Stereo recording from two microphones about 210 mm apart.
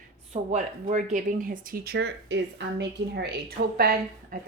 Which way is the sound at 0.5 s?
35° right (ahead or behind).